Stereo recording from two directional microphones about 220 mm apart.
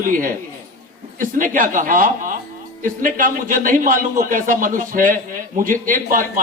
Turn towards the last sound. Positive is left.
turn(degrees=-35)  # may be behind; listen again after turning